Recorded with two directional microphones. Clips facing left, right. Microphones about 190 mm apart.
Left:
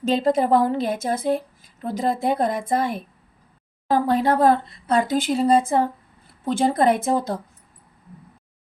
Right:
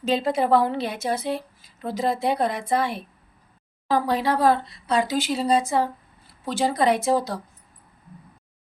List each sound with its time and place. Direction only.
0.1 s a woman's voice: 50° left (ahead or behind)